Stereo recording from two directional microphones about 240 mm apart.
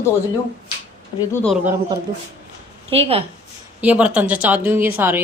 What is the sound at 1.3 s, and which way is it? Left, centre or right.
Speech, centre.